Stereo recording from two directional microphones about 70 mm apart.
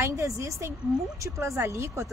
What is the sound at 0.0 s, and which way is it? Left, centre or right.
A woman's voice, right.